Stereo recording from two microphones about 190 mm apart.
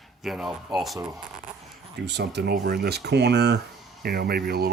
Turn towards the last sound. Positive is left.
turn(degrees=-55)  # may be behind; listen again after turning